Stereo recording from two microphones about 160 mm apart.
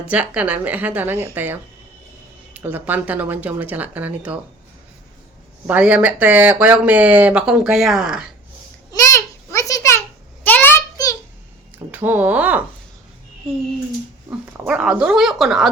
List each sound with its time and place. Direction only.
0.1 s speech: 10° right (ahead or behind)
5.6 s speech: 10° right (ahead or behind)
8.9 s a sound: 20° left (ahead or behind)
11.9 s speech: 10° right (ahead or behind)
14.3 s speech: 10° right (ahead or behind)